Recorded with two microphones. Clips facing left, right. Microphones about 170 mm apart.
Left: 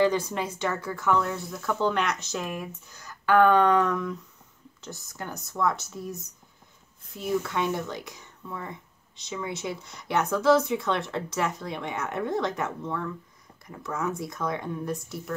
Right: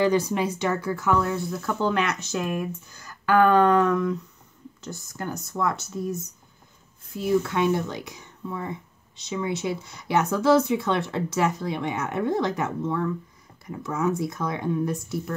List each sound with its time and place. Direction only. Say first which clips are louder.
0.0 s speech: right 2 dB; 10° right (ahead or behind)
7.2 s speech: right 5 dB; centre (ahead or behind)